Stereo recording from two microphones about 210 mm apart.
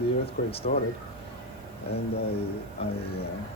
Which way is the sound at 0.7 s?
35° left (ahead or behind).